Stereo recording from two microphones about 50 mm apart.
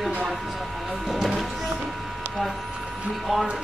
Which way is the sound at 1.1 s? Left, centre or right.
Centre.